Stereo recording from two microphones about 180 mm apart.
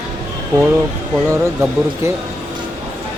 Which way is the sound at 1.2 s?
15° right (ahead or behind).